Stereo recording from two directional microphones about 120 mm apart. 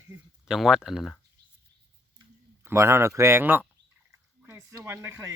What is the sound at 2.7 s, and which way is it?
Speech, 20° right (ahead or behind).